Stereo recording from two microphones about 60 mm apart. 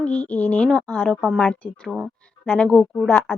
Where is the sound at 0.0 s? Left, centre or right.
Left.